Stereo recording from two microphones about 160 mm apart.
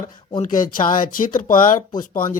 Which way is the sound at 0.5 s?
60° left (ahead or behind).